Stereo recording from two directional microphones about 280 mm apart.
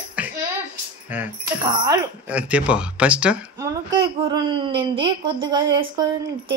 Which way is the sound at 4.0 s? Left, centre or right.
Centre.